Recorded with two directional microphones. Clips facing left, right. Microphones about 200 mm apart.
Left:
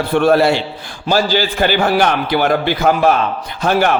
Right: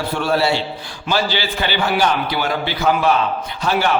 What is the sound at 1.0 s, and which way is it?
A man's voice, 45° left (ahead or behind).